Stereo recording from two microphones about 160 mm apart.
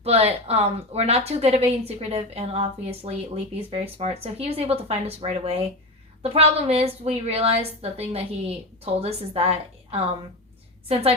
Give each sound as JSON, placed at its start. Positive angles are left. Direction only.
{"t": 0.0, "sound": "a woman's voice", "side_deg": -40}